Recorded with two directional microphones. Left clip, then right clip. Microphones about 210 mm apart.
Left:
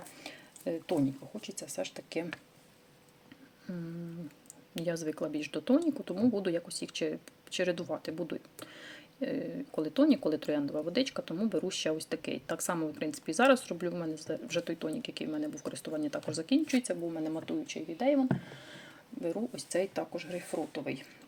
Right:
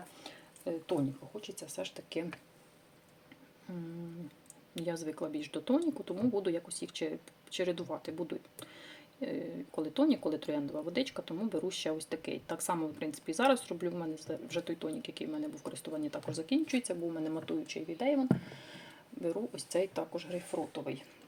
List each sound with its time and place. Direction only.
0.2 s a sound: 25° left (ahead or behind)
1.4 s speech: 20° left (ahead or behind)
4.7 s speech: 20° left (ahead or behind)